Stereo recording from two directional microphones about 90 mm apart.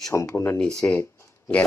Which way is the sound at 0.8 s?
20° left (ahead or behind).